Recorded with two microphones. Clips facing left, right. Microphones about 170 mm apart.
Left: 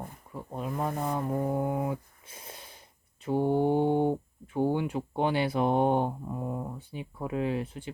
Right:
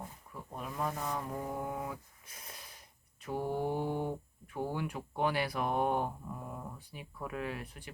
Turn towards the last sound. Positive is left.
turn(degrees=25)  # may be behind; listen again after turning